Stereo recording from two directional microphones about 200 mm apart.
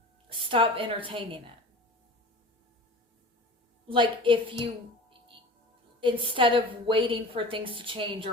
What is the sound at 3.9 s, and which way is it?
Speech, 25° right (ahead or behind).